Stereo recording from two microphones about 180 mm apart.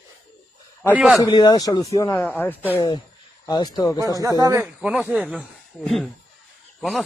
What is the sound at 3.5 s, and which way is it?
Speech, 20° left (ahead or behind).